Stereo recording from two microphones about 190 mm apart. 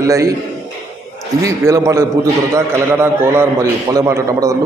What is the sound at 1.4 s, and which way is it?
A man's voice, 15° right (ahead or behind).